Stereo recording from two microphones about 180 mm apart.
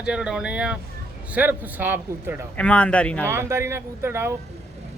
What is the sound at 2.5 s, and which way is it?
Speech, 5° left (ahead or behind).